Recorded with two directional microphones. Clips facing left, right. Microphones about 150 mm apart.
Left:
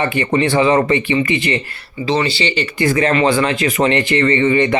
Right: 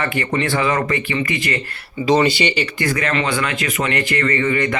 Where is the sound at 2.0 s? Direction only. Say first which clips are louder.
Right 2 dB; 20° right (ahead or behind).